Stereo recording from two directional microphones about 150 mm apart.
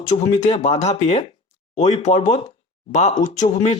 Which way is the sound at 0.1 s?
40° left (ahead or behind).